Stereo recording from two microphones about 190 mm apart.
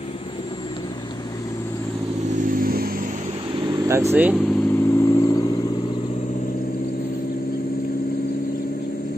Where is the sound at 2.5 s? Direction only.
50° right (ahead or behind).